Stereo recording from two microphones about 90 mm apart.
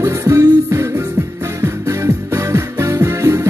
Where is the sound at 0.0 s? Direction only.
35° right (ahead or behind).